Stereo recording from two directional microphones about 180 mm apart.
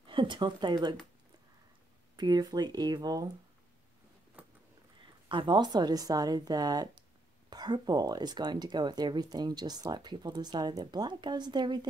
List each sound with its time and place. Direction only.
0.0 s speech: 25° right (ahead or behind)
2.1 s speech: 25° right (ahead or behind)
4.4 s a sound: 5° right (ahead or behind)
5.3 s speech: 25° right (ahead or behind)